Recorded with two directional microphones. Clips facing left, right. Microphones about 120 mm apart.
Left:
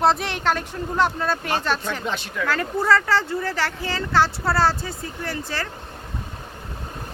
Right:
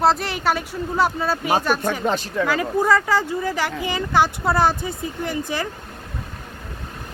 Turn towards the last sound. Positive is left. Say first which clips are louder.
# right 4 dB
turn(degrees=-15)  # may be behind; listen again after turning